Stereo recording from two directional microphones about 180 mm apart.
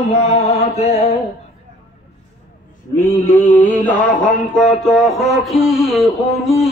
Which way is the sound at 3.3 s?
10° left (ahead or behind).